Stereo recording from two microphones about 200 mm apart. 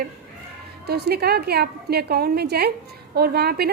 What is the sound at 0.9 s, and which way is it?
A woman's voice, 55° right (ahead or behind).